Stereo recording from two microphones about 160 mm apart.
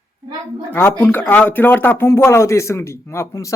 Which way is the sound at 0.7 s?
15° left (ahead or behind).